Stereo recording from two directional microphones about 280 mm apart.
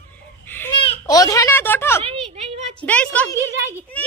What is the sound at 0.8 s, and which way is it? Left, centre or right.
A child's voice, centre.